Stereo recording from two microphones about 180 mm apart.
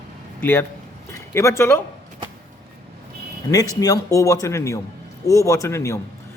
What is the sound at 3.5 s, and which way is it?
A man's voice, 20° left (ahead or behind).